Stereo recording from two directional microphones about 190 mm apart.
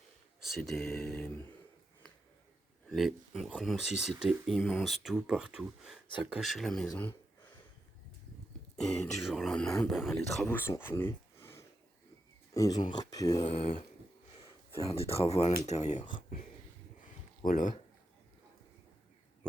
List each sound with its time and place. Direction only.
0.4 s speech: centre (ahead or behind)
2.9 s speech: centre (ahead or behind)
8.7 s speech: 5° left (ahead or behind)
10.5 s speech: 10° left (ahead or behind)
13.4 s speech: 30° left (ahead or behind)
14.8 s speech: 30° left (ahead or behind)
17.4 s speech: 45° left (ahead or behind)